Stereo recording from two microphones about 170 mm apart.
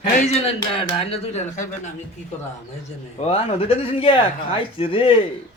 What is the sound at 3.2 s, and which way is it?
Speech, 35° left (ahead or behind).